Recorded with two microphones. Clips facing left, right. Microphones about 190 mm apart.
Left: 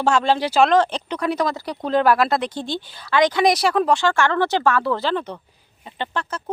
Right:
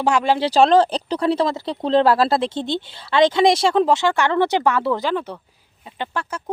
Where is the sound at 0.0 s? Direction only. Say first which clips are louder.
Even; 15° right (ahead or behind).